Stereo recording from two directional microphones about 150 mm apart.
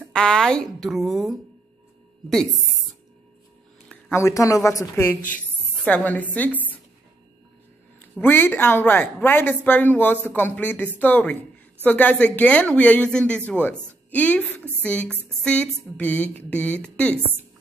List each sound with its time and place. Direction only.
0.1 s speech: 5° left (ahead or behind)
4.1 s a woman's voice: 20° left (ahead or behind)
8.1 s a woman's voice: 15° left (ahead or behind)